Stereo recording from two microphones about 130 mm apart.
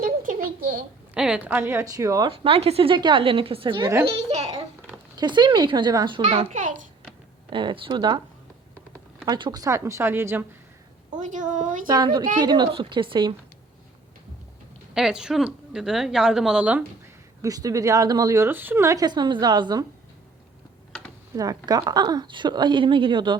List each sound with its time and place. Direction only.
0.0 s a sound: 90° right
1.1 s a woman's voice: 5° right (ahead or behind); by 2.2 s 25° right (ahead or behind)
2.2 s a woman's voice: 45° right (ahead or behind)
4.0 s a child's voice: 50° right (ahead or behind)
5.1 s speech: 35° right (ahead or behind)
6.5 s a woman's voice: 75° right (ahead or behind)
7.5 s speech: 40° right (ahead or behind)
9.2 s a woman's voice: 35° right (ahead or behind); by 10.4 s 20° right (ahead or behind)
11.1 s a woman's voice: 75° right (ahead or behind)
11.9 s speech: 35° right (ahead or behind)
14.9 s a woman's voice: 5° right (ahead or behind)
17.4 s a woman's voice: 25° right (ahead or behind)
21.3 s speech: 30° right (ahead or behind)